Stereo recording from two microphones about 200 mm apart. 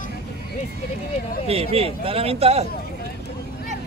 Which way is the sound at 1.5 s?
30° right (ahead or behind).